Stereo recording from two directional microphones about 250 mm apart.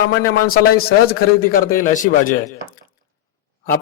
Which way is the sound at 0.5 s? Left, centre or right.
Left.